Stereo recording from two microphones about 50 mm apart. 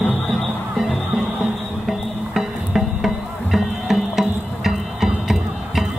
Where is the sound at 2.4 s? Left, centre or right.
Centre.